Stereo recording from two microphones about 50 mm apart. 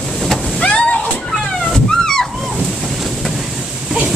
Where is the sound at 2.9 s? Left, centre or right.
Centre.